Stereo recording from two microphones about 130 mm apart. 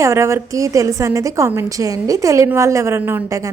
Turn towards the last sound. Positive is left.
turn(degrees=-20)  # may be behind; listen again after turning